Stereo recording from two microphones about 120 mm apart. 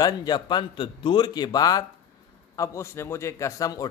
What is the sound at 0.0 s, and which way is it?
A man's voice, 35° left (ahead or behind).